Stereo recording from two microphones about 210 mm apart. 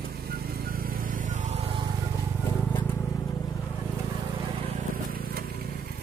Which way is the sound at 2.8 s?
10° left (ahead or behind).